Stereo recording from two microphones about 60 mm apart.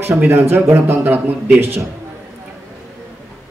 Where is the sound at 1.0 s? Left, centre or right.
Right.